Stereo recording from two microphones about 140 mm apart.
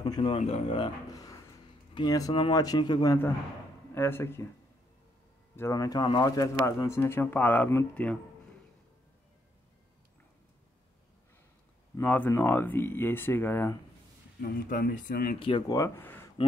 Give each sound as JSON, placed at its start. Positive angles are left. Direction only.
{"t": 0.0, "sound": "speech", "side_deg": 30}
{"t": 0.3, "sound": "speech", "side_deg": 45}
{"t": 1.1, "sound": "a sound", "side_deg": 25}
{"t": 2.0, "sound": "speech", "side_deg": 25}
{"t": 3.9, "sound": "speech", "side_deg": 15}
{"t": 5.6, "sound": "speech", "side_deg": 25}
{"t": 12.0, "sound": "speech", "side_deg": 15}
{"t": 14.4, "sound": "speech", "side_deg": 90}
{"t": 15.3, "sound": "speech", "side_deg": 40}
{"t": 16.0, "sound": "a sound", "side_deg": 15}